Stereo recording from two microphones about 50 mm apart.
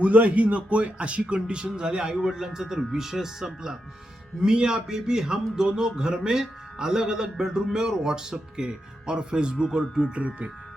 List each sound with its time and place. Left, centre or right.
0.0 s a man's voice: right; by 10.1 s centre
10.2 s speech: right